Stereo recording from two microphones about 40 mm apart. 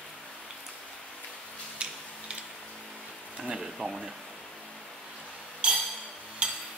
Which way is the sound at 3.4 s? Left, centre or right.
Centre.